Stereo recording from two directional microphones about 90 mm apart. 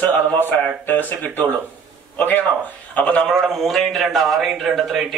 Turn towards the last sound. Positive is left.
turn(degrees=0)  # may be behind; listen again after turning